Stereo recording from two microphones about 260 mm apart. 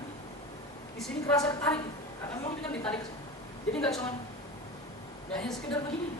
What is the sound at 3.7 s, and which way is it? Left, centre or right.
Speech, centre.